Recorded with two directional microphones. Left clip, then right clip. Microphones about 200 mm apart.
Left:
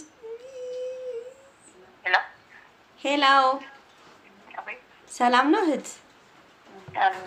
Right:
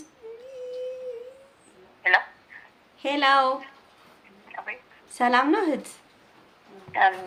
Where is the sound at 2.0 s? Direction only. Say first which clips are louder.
Right 3 dB; 20° right (ahead or behind).